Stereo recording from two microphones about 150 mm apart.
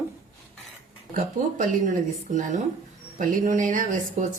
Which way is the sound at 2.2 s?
55° right (ahead or behind).